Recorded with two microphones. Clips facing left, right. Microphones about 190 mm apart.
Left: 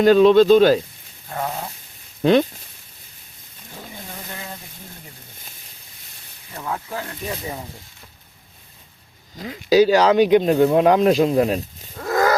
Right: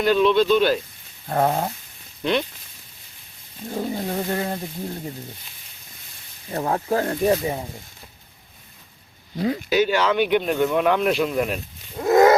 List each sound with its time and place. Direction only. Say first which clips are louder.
0.0 s speech: left 6 dB; 40° left (ahead or behind)
1.3 s speech: right 7 dB; 50° right (ahead or behind)
3.7 s speech: right 12 dB; 50° right (ahead or behind)
6.5 s speech: right 7 dB; 45° right (ahead or behind)
7.4 s speech: right 5 dB; 20° right (ahead or behind)
9.6 s speech: left 8 dB; 35° left (ahead or behind)
11.9 s a sound: right 5 dB; 25° right (ahead or behind)